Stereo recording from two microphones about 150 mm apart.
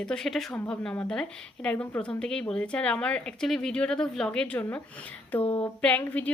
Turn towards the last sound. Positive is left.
turn(degrees=10)  # may be behind; listen again after turning